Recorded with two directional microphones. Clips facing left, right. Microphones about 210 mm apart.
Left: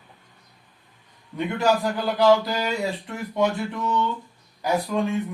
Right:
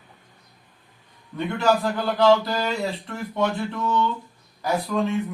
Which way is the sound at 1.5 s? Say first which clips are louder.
Right 1 dB; 15° left (ahead or behind).